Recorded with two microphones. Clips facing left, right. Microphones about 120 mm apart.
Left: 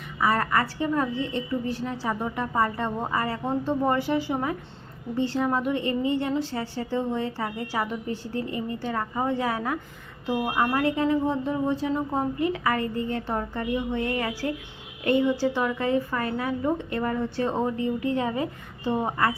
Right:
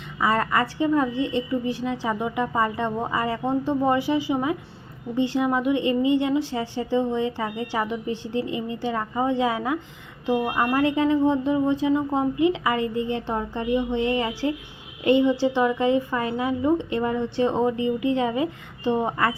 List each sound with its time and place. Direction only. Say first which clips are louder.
0.2 s a woman's voice: right 1 dB; 20° right (ahead or behind)